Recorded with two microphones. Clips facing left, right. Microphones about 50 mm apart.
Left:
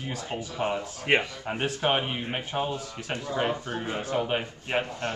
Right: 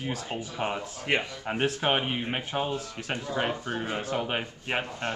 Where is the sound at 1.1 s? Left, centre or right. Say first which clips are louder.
Left 4 dB; centre.